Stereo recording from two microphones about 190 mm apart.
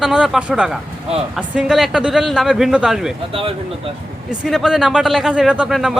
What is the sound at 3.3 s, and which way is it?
Speech, 30° right (ahead or behind).